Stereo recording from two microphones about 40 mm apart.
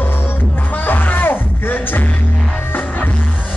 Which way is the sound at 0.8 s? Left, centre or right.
Left.